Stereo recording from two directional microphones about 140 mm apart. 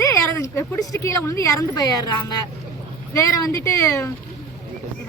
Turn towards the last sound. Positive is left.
turn(degrees=20)  # may be behind; listen again after turning